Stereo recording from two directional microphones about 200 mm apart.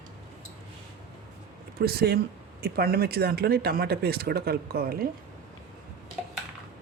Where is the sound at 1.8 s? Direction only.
50° right (ahead or behind).